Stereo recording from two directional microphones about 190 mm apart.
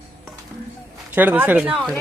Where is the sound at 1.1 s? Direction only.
10° right (ahead or behind).